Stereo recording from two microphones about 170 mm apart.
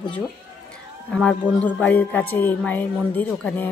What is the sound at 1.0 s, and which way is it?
Speech, 5° left (ahead or behind).